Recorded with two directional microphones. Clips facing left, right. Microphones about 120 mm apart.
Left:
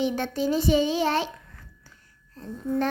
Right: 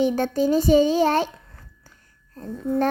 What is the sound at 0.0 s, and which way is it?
A child's voice, 45° right (ahead or behind).